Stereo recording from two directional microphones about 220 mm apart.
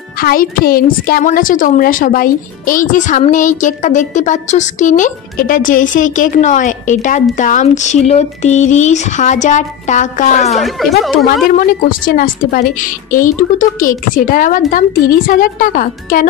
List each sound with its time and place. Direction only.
0.2 s a woman's voice: 40° left (ahead or behind)
10.5 s speech: centre (ahead or behind)
12.2 s a woman's voice: 40° left (ahead or behind)